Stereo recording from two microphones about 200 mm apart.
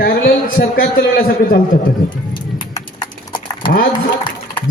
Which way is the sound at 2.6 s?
20° left (ahead or behind).